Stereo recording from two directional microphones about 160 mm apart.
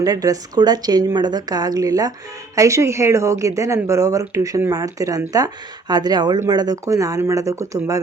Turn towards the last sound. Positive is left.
turn(degrees=-20)  # may be behind; listen again after turning